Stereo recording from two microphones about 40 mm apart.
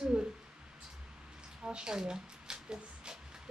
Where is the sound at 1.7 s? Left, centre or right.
Centre.